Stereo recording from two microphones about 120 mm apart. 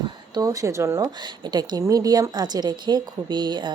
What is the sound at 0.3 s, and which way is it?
A woman's voice, 30° right (ahead or behind).